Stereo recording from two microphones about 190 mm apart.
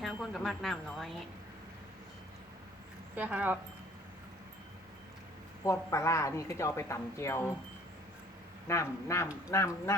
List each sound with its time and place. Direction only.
0.0 s speech: centre (ahead or behind)
3.2 s speech: 10° right (ahead or behind)
5.6 s speech: 15° left (ahead or behind)
8.6 s speech: 15° left (ahead or behind)